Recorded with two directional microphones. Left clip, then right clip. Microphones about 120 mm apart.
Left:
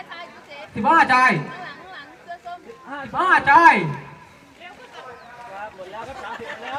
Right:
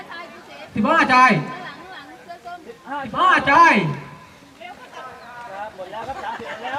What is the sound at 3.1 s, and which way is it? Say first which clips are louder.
Speech: right 1 dB; 35° left (ahead or behind).